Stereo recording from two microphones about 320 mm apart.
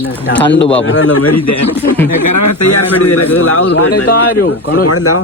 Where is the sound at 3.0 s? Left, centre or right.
Left.